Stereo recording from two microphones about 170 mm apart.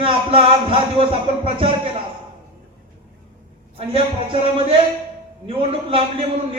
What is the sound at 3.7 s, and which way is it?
A man's voice, 35° right (ahead or behind).